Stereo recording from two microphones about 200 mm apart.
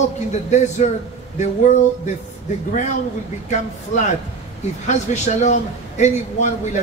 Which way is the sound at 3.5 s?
35° left (ahead or behind).